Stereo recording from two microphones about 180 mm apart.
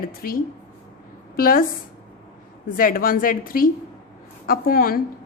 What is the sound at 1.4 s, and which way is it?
Speech, 55° left (ahead or behind).